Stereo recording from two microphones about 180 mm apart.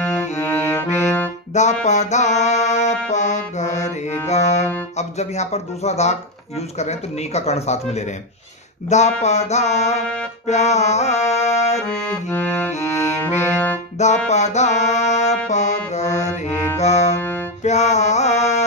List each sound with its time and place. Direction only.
0.0 s music: 10° left (ahead or behind)
1.5 s music: 40° left (ahead or behind)
4.9 s speech: 40° left (ahead or behind)
10.4 s music: 40° left (ahead or behind)
12.3 s music: 10° left (ahead or behind)
13.9 s music: 40° left (ahead or behind)
16.2 s music: 15° left (ahead or behind)
16.8 s music: 40° left (ahead or behind)
17.1 s music: 10° left (ahead or behind)
17.6 s mantra: 40° left (ahead or behind)